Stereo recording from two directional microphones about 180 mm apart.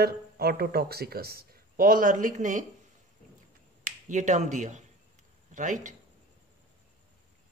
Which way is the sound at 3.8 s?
45° right (ahead or behind).